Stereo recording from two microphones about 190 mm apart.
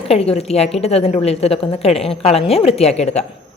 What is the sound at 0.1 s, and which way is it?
A woman's voice, 30° left (ahead or behind).